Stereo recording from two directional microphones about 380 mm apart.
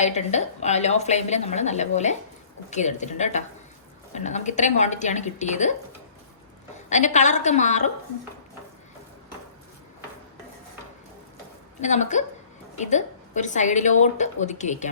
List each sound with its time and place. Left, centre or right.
0.0 s a woman's voice: centre
6.9 s a woman's voice: centre
11.8 s a woman's voice: centre